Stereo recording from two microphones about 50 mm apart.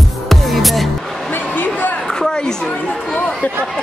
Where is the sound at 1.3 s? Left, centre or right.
Left.